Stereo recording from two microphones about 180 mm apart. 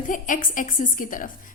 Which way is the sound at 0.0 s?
45° left (ahead or behind).